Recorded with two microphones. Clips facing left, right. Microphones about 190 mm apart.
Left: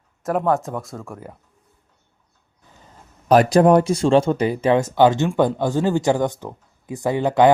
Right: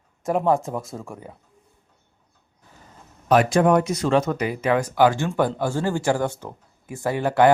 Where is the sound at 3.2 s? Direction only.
35° left (ahead or behind).